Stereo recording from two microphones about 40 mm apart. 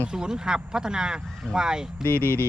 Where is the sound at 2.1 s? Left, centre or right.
Right.